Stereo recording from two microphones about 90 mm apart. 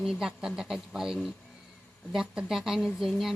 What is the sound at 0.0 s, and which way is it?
A man's voice, 5° right (ahead or behind).